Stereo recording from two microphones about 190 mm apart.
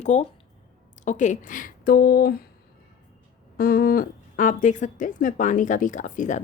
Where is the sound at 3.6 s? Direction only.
50° left (ahead or behind).